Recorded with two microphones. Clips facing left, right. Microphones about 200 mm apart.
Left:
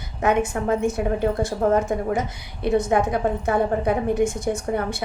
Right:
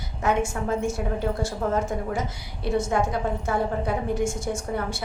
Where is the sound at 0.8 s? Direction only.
20° left (ahead or behind).